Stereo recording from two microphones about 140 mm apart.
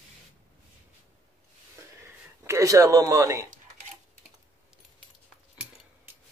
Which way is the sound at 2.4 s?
20° right (ahead or behind).